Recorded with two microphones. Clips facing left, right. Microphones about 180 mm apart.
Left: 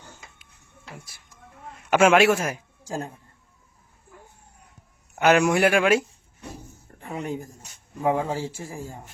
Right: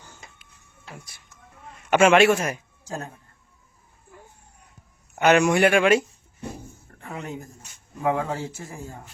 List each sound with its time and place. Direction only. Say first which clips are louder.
1.9 s speech: right 1 dB; 5° left (ahead or behind)
2.8 s a man's voice: left 3 dB; 30° left (ahead or behind)
5.2 s speech: right 1 dB; 5° left (ahead or behind)
7.0 s speech: left 3 dB; 30° left (ahead or behind)